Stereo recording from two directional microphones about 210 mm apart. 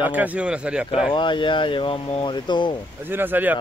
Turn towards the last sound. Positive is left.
turn(degrees=-10)  # may be behind; listen again after turning